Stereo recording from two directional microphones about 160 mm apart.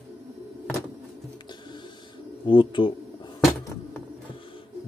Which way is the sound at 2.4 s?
30° left (ahead or behind).